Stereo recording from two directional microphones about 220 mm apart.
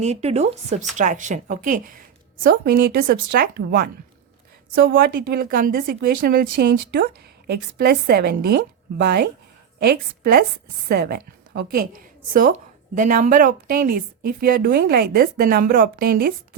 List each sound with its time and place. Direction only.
0.0 s a woman's voice: 30° right (ahead or behind)